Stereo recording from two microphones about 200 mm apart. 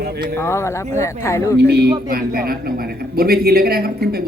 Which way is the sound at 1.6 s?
55° right (ahead or behind).